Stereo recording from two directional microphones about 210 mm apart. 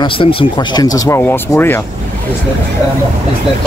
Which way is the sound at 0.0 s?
25° left (ahead or behind).